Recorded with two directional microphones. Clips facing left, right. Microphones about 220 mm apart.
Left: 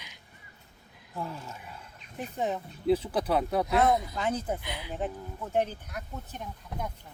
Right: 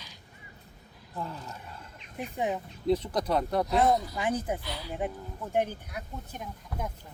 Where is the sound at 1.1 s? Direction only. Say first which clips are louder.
Left 1 dB; 10° left (ahead or behind).